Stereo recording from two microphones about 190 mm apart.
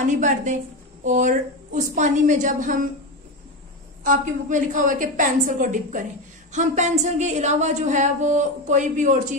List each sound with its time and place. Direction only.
0.0 s a woman's voice: 40° right (ahead or behind)
4.0 s a woman's voice: 45° right (ahead or behind)